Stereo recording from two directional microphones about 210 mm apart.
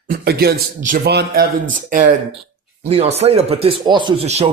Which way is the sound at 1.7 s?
40° right (ahead or behind).